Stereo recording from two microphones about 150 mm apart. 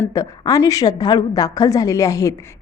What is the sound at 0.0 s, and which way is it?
A woman's voice, 25° left (ahead or behind).